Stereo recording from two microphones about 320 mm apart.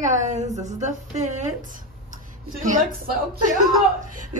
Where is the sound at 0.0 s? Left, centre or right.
Right.